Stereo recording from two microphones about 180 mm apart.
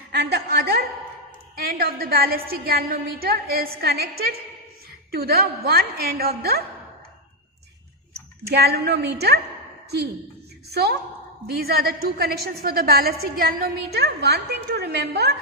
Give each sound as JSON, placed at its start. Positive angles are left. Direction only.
{"t": 0.1, "sound": "a woman's voice", "side_deg": -65}
{"t": 8.4, "sound": "a woman's voice", "side_deg": -60}
{"t": 10.7, "sound": "a woman's voice", "side_deg": -65}